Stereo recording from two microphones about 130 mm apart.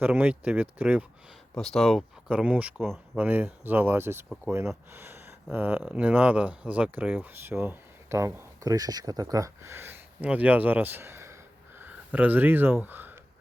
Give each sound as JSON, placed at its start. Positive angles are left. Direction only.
{"t": 0.0, "sound": "speech", "side_deg": -10}
{"t": 1.5, "sound": "speech", "side_deg": 0}
{"t": 2.7, "sound": "speech", "side_deg": 0}
{"t": 3.2, "sound": "speech", "side_deg": -10}